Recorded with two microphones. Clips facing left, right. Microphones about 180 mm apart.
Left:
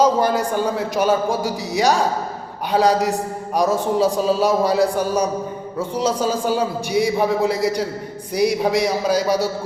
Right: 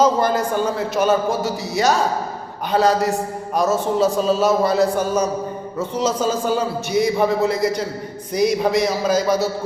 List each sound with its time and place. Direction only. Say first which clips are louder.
0.0 s a man's voice: even; 10° left (ahead or behind)